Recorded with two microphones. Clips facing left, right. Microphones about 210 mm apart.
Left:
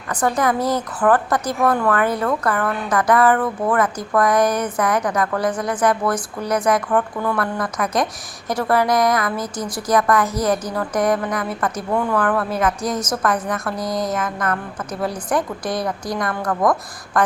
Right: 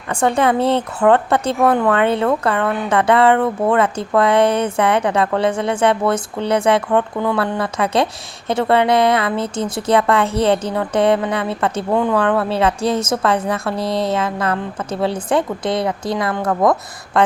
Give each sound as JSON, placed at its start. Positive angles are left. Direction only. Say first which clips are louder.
{"t": 0.1, "sound": "speech", "louder": "right 3 dB", "side_deg": -25}
{"t": 2.6, "sound": "a sound", "louder": "right 4 dB", "side_deg": 0}
{"t": 2.9, "sound": "speech", "louder": "right 2 dB", "side_deg": -25}